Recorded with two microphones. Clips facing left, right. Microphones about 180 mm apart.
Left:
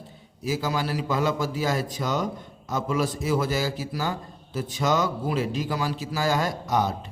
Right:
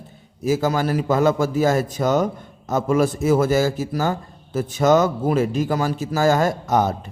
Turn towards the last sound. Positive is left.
turn(degrees=-50)  # may be behind; listen again after turning